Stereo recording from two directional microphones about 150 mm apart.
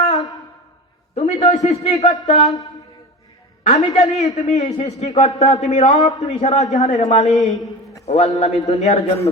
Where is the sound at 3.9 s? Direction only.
50° left (ahead or behind).